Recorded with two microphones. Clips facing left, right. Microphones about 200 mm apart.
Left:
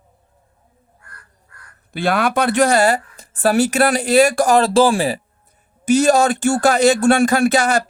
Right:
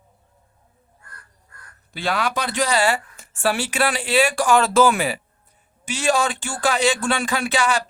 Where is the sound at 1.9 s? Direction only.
55° left (ahead or behind).